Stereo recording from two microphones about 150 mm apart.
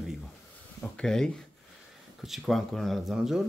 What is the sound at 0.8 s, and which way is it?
Speech, 5° left (ahead or behind).